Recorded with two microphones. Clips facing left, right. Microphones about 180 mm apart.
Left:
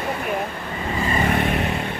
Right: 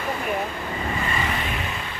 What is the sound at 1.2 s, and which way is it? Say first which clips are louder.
Vehicle: left 7 dB; 55° left (ahead or behind).